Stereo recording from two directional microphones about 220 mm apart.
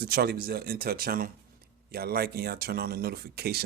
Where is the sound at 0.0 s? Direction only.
45° right (ahead or behind).